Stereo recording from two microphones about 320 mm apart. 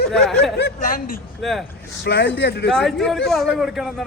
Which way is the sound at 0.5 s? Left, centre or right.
Left.